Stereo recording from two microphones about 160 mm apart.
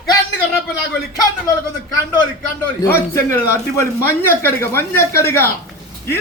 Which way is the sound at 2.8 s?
15° left (ahead or behind).